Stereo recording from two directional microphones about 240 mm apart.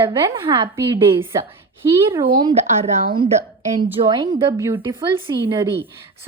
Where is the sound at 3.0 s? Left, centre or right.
Right.